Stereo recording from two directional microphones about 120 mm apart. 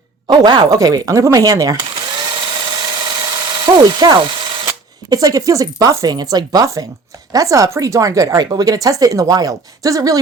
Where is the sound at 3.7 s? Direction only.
35° right (ahead or behind).